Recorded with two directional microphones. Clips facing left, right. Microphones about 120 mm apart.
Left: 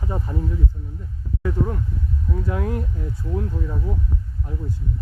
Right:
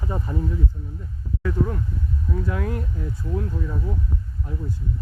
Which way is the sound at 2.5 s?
20° left (ahead or behind).